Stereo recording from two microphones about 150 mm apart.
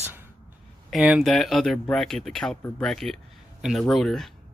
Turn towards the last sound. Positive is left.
turn(degrees=0)  # may be behind; listen again after turning